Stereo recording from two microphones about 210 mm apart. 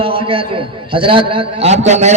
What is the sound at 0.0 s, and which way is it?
A man's voice, 25° right (ahead or behind).